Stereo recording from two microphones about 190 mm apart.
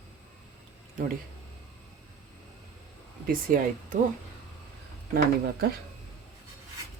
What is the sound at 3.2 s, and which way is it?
Speech, 45° right (ahead or behind).